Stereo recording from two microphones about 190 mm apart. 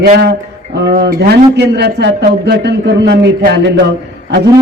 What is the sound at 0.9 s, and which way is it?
Speech, 55° right (ahead or behind).